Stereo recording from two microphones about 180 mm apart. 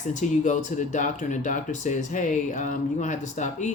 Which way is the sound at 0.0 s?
45° left (ahead or behind).